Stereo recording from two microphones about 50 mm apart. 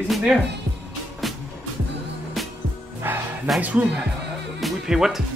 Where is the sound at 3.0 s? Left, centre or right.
Right.